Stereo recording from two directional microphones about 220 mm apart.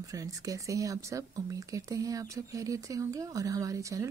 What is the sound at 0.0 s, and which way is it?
Speech, 15° right (ahead or behind).